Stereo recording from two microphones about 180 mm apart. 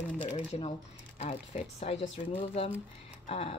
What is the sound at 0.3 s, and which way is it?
Speech, 35° left (ahead or behind).